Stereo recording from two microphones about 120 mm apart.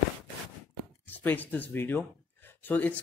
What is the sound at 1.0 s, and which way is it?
Speech, 15° left (ahead or behind).